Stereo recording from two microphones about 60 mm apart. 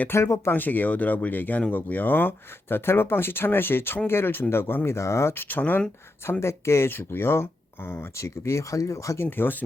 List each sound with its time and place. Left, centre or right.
0.1 s speech: left
0.5 s speech: left
6.4 s speech: left
9.3 s speech: left